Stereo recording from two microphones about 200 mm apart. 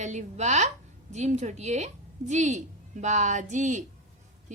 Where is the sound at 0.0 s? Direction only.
35° right (ahead or behind).